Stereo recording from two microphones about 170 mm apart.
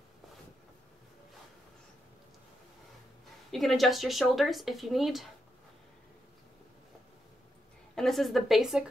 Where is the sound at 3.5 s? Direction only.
Centre (ahead or behind).